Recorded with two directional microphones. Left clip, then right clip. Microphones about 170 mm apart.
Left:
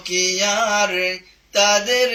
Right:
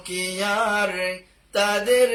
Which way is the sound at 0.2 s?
30° right (ahead or behind).